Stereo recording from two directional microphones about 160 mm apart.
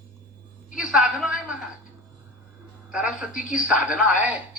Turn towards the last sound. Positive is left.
turn(degrees=-10)  # may be behind; listen again after turning